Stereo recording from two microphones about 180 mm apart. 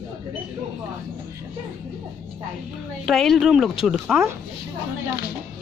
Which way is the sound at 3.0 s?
Centre (ahead or behind).